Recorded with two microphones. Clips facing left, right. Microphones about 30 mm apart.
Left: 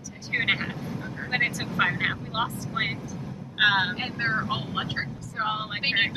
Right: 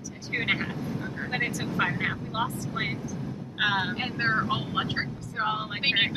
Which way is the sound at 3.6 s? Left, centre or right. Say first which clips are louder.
Left 4 dB; left.